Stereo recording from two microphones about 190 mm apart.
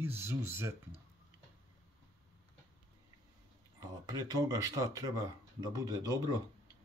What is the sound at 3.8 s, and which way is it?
Speech, 20° right (ahead or behind).